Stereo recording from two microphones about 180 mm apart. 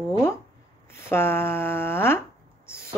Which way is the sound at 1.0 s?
15° left (ahead or behind).